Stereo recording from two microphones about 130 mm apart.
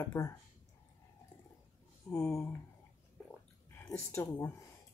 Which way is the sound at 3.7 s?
20° left (ahead or behind).